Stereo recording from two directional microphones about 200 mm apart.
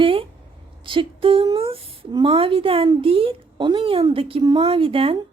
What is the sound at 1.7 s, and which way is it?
Speech, 25° right (ahead or behind).